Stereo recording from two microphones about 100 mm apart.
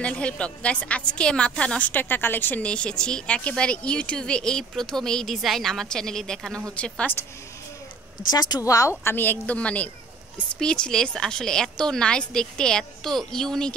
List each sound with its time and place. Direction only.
0.0 s a woman's voice: 10° left (ahead or behind)
8.3 s a woman's voice: 45° left (ahead or behind)
9.0 s a woman's voice: 20° left (ahead or behind)